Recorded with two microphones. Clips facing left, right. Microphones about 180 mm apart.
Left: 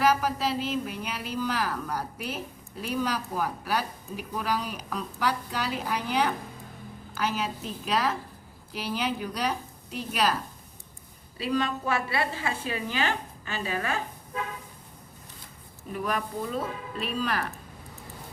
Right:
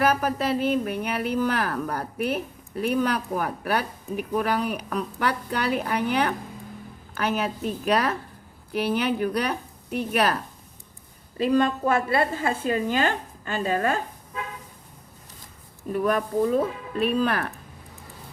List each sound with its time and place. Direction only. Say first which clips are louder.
0.0 s a woman's voice: right 2 dB; 55° right (ahead or behind)
11.3 s a woman's voice: right 7 dB; 50° right (ahead or behind)
15.9 s a woman's voice: right 7 dB; 45° right (ahead or behind)